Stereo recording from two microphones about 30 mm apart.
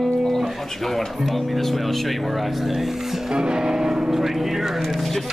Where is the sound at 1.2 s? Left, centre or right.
Centre.